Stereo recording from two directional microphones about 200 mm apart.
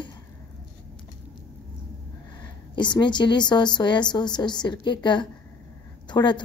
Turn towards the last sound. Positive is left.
turn(degrees=20)  # may be behind; listen again after turning